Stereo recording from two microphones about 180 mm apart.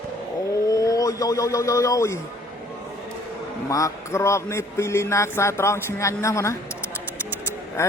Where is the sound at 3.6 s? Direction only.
15° left (ahead or behind).